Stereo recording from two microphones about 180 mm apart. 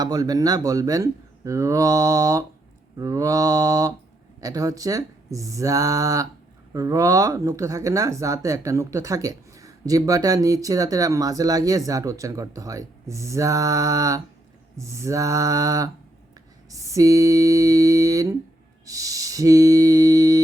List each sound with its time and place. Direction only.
0.0 s speech: 20° right (ahead or behind)